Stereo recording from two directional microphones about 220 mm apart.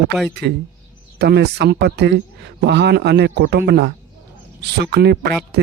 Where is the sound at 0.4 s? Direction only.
50° right (ahead or behind).